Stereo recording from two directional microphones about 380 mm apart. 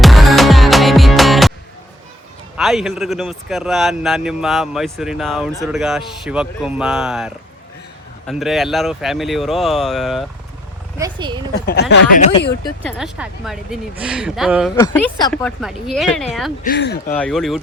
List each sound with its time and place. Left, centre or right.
0.0 s music: centre
2.6 s speech: centre
11.6 s speech: left
12.6 s speech: centre
16.6 s speech: left
17.1 s speech: centre